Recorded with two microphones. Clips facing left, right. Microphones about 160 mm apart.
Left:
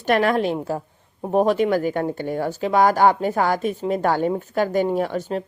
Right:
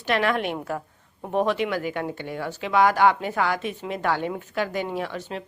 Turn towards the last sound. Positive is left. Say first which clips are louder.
# left 7 dB
turn(degrees=40)  # may be behind; listen again after turning